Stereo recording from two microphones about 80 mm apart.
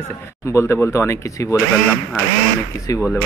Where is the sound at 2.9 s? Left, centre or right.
Centre.